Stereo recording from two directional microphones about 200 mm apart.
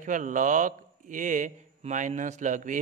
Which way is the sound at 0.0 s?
40° right (ahead or behind).